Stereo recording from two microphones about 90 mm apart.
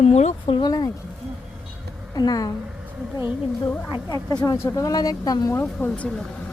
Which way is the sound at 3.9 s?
45° left (ahead or behind).